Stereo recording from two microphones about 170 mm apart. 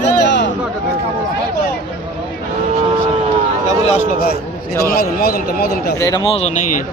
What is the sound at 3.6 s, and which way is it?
Speech, 45° left (ahead or behind).